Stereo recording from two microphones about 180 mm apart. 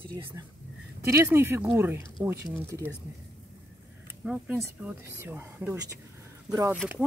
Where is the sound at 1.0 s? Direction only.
15° right (ahead or behind).